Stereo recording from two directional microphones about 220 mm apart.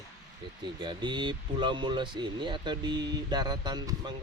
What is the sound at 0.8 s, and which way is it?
Speech, 20° right (ahead or behind).